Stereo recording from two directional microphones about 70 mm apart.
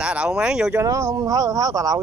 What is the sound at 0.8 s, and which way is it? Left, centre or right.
Speech, right.